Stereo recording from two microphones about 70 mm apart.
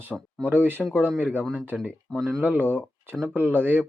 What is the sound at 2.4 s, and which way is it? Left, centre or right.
Speech, right.